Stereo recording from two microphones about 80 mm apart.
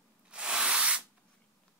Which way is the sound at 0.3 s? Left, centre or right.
Centre.